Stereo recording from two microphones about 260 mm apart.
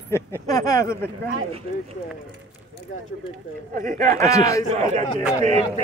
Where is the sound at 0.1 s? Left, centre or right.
Centre.